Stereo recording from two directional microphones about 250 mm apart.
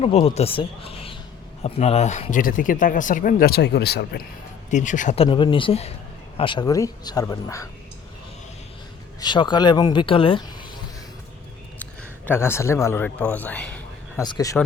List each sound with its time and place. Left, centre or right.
0.0 s speech: left
4.7 s speech: left; by 7.7 s centre
9.2 s speech: centre
11.8 s a man's voice: centre